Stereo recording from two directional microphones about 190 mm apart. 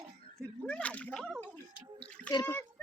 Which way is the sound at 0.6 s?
5° left (ahead or behind).